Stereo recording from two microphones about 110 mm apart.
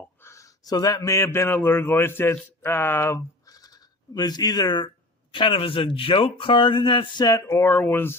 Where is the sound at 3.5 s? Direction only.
35° left (ahead or behind).